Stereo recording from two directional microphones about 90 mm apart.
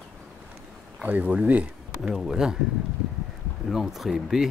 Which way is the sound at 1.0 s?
20° right (ahead or behind).